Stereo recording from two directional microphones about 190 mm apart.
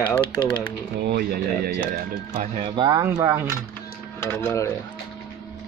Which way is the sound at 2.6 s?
25° right (ahead or behind).